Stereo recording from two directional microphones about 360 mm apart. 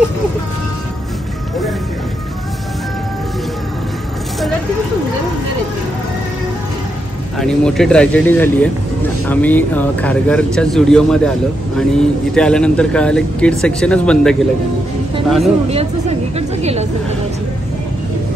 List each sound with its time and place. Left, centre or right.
7.3 s speech: centre
15.7 s a woman's voice: centre